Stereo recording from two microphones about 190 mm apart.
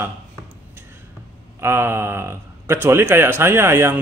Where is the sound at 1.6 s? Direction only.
15° right (ahead or behind).